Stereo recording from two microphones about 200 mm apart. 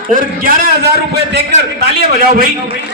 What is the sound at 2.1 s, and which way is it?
Speech, 45° right (ahead or behind).